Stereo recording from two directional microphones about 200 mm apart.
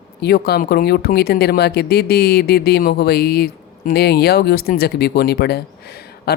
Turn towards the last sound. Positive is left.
turn(degrees=50)  # may be behind; listen again after turning